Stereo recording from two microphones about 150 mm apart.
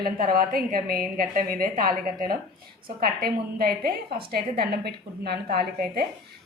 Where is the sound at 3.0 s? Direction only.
90° right.